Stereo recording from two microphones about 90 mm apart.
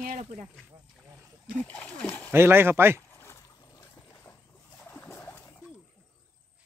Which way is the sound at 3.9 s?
30° left (ahead or behind).